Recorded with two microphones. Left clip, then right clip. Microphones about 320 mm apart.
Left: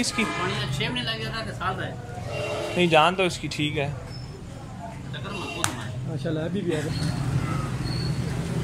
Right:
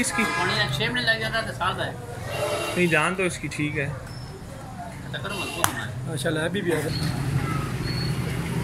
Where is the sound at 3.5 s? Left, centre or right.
Left.